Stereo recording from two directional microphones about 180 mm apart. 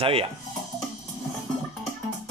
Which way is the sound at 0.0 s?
30° right (ahead or behind).